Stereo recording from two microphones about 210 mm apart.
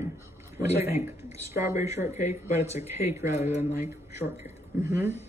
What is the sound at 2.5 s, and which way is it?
Speech, 30° left (ahead or behind).